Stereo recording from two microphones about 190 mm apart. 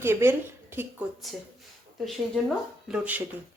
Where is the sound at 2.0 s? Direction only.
Centre (ahead or behind).